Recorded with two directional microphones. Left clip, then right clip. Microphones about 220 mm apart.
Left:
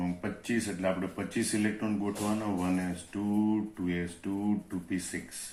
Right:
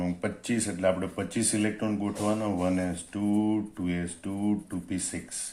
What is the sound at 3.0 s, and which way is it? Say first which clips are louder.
A man's voice: right 3 dB; 45° right (ahead or behind).